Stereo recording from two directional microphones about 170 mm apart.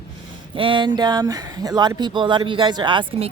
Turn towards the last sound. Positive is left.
turn(degrees=-30)  # may be behind; listen again after turning